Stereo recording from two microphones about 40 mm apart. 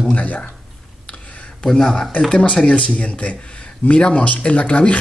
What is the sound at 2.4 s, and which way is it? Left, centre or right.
Speech, left.